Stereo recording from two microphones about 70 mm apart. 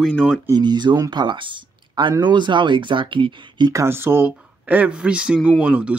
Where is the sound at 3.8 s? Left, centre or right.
Right.